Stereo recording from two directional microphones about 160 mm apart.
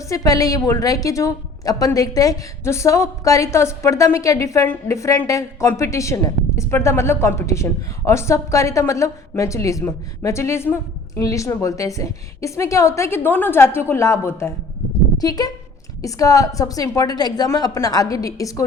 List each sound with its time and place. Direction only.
0.0 s a woman's voice: 20° left (ahead or behind)